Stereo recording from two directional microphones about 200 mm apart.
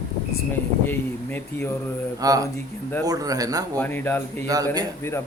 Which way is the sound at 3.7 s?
10° left (ahead or behind).